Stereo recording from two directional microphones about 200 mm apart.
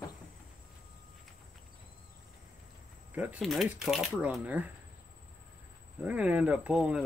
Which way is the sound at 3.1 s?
10° right (ahead or behind).